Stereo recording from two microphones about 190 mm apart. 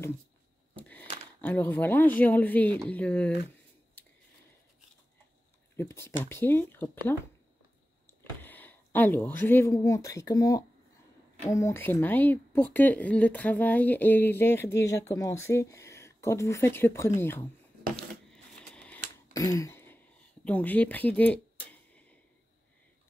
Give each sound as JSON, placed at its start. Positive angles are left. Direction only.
{"t": 0.7, "sound": "a sound", "side_deg": 10}
{"t": 1.4, "sound": "speech", "side_deg": 10}
{"t": 5.8, "sound": "speech", "side_deg": 15}
{"t": 17.9, "sound": "a sound", "side_deg": 5}
{"t": 19.3, "sound": "throat clearing", "side_deg": 15}
{"t": 20.4, "sound": "speech", "side_deg": 10}